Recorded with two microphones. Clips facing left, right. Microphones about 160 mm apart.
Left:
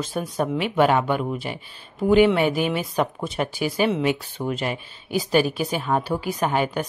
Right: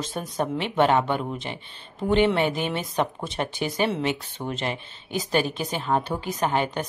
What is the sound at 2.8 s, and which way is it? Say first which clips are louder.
A woman's voice: left 2 dB; 5° left (ahead or behind).